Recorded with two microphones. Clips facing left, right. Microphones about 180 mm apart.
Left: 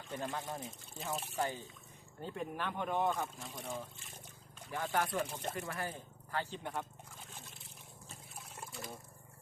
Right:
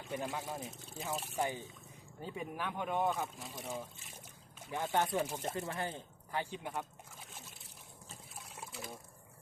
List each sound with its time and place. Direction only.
0.1 s speech: 10° right (ahead or behind)
4.7 s speech: 20° right (ahead or behind)
5.0 s speech: 5° right (ahead or behind)
5.5 s speech: 25° right (ahead or behind); by 6.8 s 5° right (ahead or behind)
7.3 s slosh: centre (ahead or behind)
8.4 s liquid: centre (ahead or behind)